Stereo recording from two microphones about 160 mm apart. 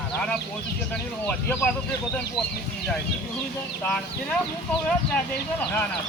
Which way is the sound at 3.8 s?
10° left (ahead or behind).